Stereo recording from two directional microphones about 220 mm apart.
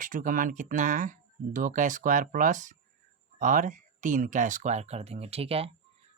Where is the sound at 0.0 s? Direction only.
40° right (ahead or behind).